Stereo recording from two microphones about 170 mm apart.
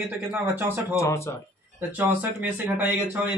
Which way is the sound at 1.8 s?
10° right (ahead or behind).